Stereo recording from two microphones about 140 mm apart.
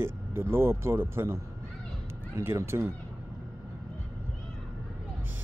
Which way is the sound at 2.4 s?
20° right (ahead or behind).